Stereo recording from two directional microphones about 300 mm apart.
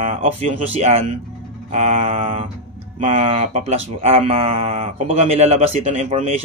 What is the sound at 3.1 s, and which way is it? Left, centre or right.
Speech, centre.